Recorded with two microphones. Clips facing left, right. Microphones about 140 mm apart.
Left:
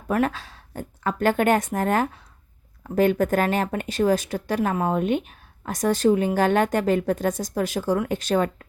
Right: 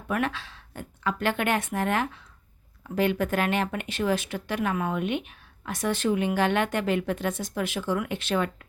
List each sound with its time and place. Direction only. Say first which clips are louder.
0.1 s speech: left 5 dB; 40° left (ahead or behind)